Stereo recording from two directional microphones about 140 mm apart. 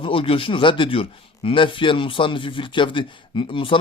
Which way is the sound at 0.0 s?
40° left (ahead or behind).